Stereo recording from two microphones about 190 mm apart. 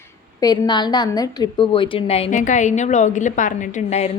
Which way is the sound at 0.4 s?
20° left (ahead or behind).